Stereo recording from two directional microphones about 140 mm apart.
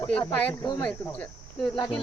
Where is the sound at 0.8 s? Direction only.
10° left (ahead or behind).